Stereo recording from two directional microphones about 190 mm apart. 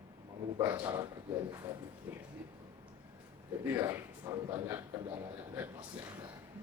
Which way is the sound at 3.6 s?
10° right (ahead or behind).